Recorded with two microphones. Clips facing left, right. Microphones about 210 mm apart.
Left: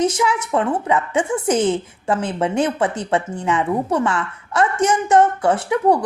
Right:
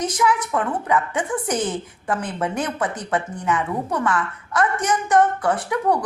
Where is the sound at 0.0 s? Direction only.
25° left (ahead or behind).